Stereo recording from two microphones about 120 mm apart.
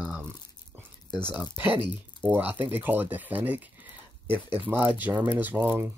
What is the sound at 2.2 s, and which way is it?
Speech, 15° right (ahead or behind).